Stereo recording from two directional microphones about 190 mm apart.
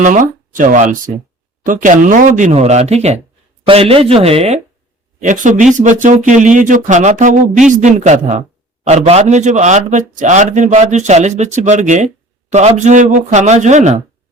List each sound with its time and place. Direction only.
0.0 s a man's voice: 40° right (ahead or behind)